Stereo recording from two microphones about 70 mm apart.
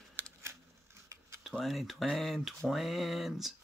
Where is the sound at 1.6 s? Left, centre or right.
Centre.